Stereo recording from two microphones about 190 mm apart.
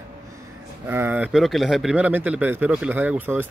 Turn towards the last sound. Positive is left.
turn(degrees=-10)  # may be behind; listen again after turning